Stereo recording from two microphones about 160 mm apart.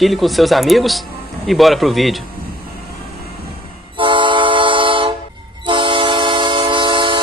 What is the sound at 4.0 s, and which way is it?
Train, 30° right (ahead or behind).